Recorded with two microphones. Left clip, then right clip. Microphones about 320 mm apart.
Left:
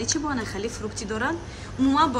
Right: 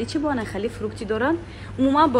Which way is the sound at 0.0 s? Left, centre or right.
Centre.